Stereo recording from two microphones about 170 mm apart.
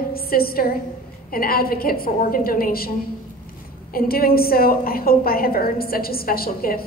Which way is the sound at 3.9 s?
60° left (ahead or behind).